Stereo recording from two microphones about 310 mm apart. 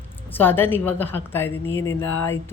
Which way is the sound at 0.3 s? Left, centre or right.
Centre.